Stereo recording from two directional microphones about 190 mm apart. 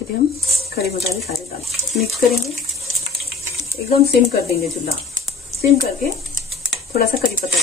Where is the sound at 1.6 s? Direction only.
Centre (ahead or behind).